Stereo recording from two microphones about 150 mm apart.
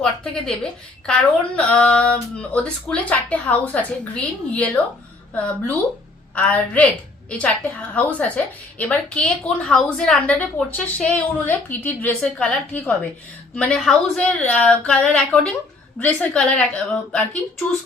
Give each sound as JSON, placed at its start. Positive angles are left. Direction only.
{"t": 0.0, "sound": "a woman's voice", "side_deg": 5}